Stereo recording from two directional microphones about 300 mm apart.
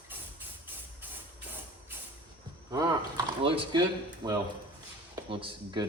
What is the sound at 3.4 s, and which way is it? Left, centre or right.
Speech, centre.